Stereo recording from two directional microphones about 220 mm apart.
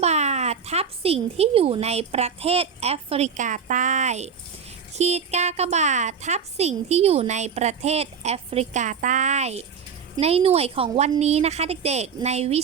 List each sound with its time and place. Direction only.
0.0 s a woman's voice: 30° right (ahead or behind)